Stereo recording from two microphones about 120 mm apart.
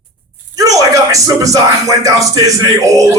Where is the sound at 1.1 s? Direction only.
30° right (ahead or behind).